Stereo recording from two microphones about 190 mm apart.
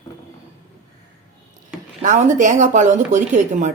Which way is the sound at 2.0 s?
40° right (ahead or behind).